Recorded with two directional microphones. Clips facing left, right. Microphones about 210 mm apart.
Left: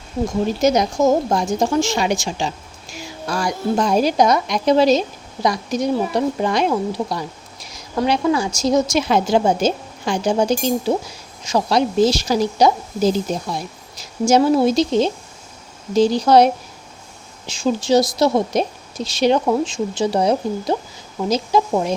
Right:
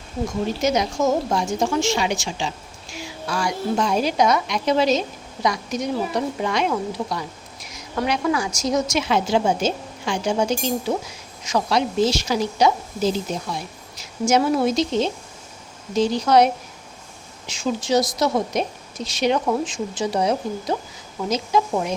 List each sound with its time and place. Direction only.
0.6 s a woman's voice: 40° left (ahead or behind)